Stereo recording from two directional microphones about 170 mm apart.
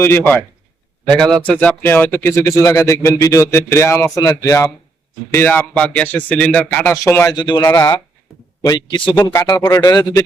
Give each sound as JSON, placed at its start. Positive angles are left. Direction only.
{"t": 0.0, "sound": "a man's voice", "side_deg": 15}